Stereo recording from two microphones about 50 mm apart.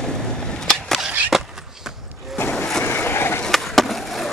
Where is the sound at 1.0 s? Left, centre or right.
Centre.